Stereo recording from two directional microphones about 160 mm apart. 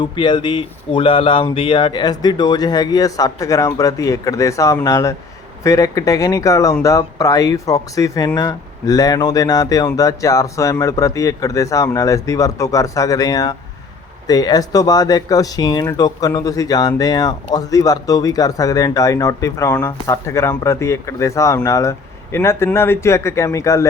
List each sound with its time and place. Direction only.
0.0 s speech: 30° left (ahead or behind)